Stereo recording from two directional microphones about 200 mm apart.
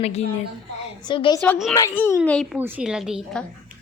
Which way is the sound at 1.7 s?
15° left (ahead or behind).